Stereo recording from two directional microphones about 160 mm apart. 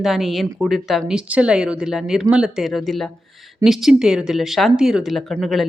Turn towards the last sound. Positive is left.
turn(degrees=0)  # may be behind; listen again after turning